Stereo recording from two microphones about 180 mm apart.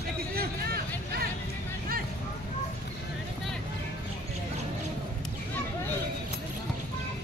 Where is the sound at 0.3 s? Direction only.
55° right (ahead or behind).